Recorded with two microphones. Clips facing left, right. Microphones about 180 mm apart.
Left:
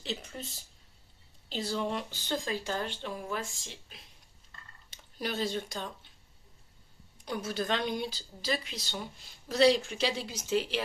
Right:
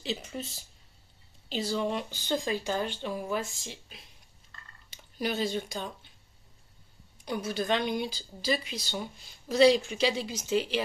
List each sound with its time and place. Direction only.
0.0 s speech: 5° right (ahead or behind)
1.5 s speech: centre (ahead or behind)
7.4 s speech: centre (ahead or behind)